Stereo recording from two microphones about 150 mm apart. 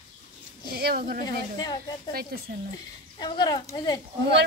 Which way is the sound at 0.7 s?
90° right.